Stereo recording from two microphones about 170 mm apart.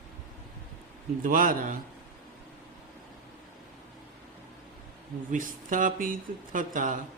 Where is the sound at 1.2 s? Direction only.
55° right (ahead or behind).